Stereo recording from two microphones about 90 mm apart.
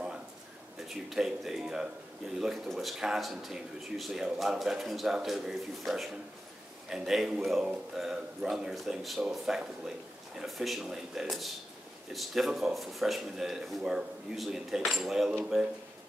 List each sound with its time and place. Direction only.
0.7 s a man's voice: 5° right (ahead or behind)